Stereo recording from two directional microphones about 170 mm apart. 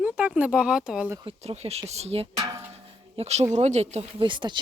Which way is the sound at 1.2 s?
35° right (ahead or behind).